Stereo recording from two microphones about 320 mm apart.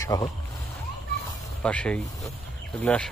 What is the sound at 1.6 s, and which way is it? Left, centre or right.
Speech, centre.